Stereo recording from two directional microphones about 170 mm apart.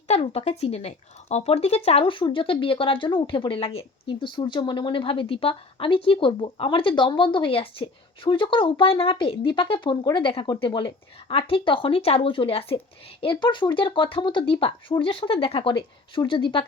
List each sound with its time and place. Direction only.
0.1 s speech: 40° left (ahead or behind)